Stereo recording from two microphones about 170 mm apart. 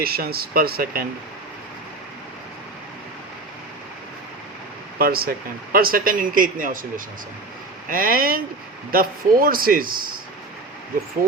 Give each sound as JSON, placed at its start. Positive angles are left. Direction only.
{"t": 0.0, "sound": "a man's voice", "side_deg": -65}
{"t": 4.9, "sound": "a man's voice", "side_deg": -60}